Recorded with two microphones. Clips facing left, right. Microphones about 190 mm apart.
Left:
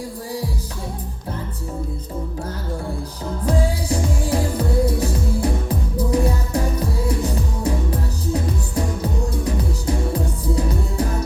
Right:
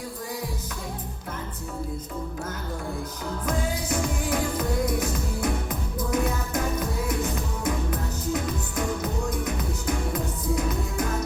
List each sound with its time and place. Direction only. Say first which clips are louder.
3.4 s music: left 7 dB; 35° left (ahead or behind)